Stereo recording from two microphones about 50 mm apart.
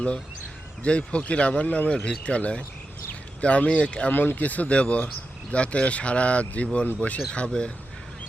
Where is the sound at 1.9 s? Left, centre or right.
Left.